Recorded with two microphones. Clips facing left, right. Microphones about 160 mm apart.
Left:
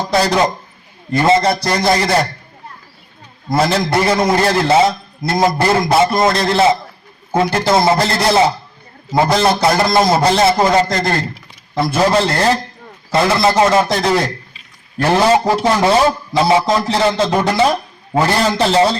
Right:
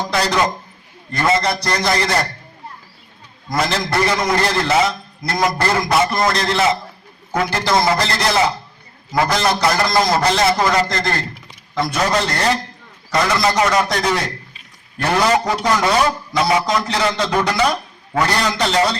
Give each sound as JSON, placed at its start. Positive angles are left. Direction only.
{"t": 0.1, "sound": "a man's voice", "side_deg": 30}
{"t": 3.5, "sound": "a man's voice", "side_deg": 25}